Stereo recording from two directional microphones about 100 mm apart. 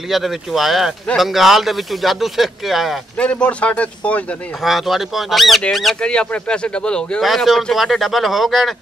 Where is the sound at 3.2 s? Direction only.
15° left (ahead or behind).